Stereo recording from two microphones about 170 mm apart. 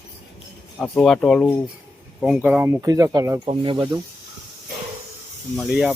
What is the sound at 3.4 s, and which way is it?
Speech, 30° right (ahead or behind).